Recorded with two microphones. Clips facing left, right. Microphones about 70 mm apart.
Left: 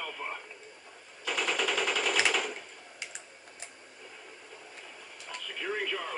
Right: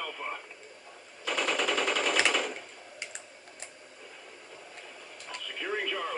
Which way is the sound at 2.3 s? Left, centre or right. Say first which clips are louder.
Right 1 dB; centre.